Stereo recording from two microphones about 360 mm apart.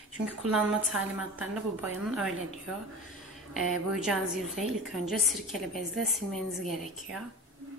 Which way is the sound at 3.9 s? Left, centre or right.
Centre.